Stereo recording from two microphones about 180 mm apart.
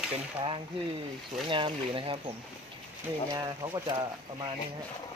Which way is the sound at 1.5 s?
30° right (ahead or behind).